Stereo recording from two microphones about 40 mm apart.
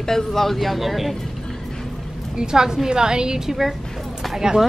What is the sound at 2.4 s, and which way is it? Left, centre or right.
A woman's voice, centre.